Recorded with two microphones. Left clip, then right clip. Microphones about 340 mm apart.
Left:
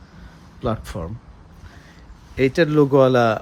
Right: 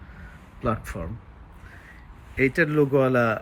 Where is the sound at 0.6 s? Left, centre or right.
Centre.